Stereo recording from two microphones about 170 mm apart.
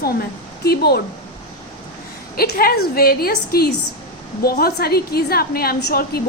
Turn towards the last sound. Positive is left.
turn(degrees=70)  # may be behind; listen again after turning